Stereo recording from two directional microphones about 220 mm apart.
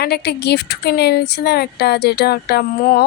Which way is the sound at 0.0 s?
50° left (ahead or behind).